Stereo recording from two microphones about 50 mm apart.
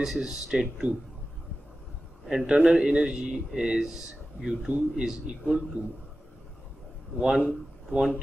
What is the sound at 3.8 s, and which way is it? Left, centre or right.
Speech, centre.